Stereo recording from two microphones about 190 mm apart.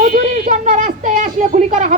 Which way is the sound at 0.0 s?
45° right (ahead or behind).